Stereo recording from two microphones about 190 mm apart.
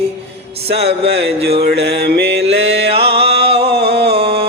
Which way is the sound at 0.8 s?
60° right (ahead or behind).